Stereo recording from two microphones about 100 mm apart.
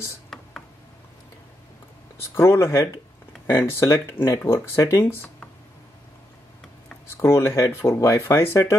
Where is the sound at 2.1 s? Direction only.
25° left (ahead or behind).